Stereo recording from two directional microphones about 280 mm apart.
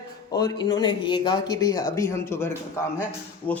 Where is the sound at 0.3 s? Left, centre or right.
Centre.